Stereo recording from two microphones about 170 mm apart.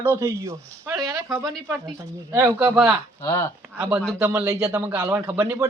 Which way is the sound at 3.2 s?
15° left (ahead or behind).